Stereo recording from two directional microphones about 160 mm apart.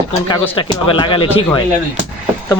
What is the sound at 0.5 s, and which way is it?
Speech, 30° left (ahead or behind).